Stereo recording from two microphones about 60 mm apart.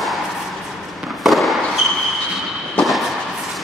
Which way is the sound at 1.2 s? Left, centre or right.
Centre.